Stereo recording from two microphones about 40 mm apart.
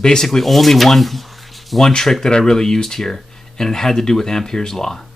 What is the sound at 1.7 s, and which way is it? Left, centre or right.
Speech, centre.